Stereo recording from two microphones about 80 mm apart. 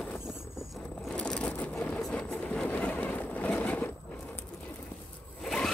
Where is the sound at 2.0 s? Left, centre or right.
Centre.